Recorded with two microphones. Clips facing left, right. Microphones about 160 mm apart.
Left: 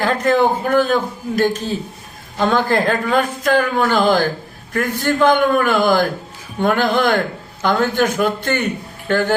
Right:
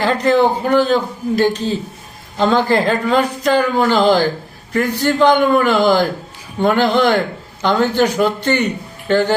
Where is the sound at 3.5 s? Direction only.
20° right (ahead or behind).